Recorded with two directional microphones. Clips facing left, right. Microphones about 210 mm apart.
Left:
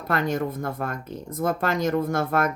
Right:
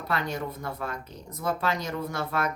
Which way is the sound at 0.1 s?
50° left (ahead or behind).